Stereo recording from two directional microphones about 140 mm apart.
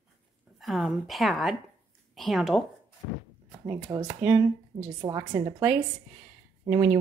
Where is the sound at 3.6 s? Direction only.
20° right (ahead or behind).